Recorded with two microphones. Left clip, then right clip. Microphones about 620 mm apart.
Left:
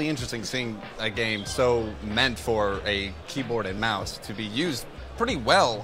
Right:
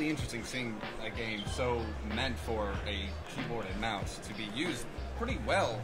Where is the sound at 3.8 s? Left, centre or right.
Left.